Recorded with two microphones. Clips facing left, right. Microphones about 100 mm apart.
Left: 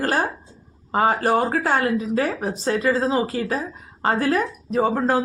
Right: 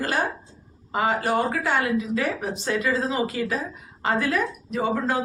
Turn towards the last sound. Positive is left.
turn(degrees=40)  # may be behind; listen again after turning